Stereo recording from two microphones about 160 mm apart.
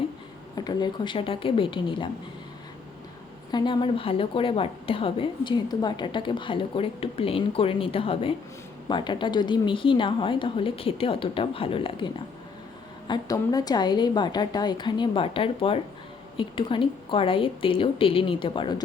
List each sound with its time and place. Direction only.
0.5 s a woman's voice: 25° left (ahead or behind)
3.5 s a woman's voice: 30° left (ahead or behind)